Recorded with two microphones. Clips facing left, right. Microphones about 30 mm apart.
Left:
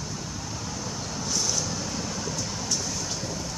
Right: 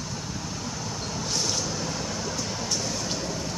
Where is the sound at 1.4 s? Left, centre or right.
Right.